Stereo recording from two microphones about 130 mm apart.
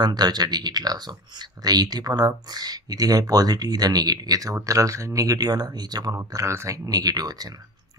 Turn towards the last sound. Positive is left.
turn(degrees=-30)  # may be behind; listen again after turning